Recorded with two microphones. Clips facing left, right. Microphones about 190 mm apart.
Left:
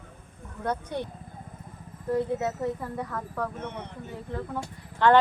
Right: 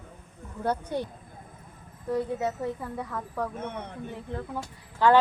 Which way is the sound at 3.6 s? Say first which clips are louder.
Right 1 dB; 50° right (ahead or behind).